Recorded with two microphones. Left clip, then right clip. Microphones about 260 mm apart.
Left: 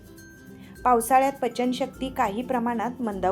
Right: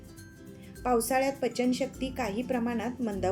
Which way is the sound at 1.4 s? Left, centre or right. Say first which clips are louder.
Left 3 dB; centre.